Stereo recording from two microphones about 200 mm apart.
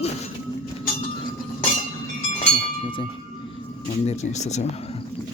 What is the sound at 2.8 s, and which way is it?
Speech, 25° left (ahead or behind).